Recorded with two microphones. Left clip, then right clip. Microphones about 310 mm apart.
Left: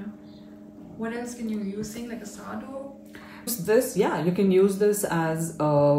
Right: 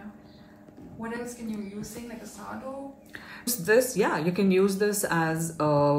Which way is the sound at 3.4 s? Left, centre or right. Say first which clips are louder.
Even; centre.